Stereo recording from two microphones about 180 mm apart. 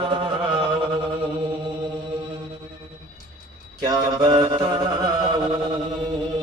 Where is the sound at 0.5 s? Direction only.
30° right (ahead or behind).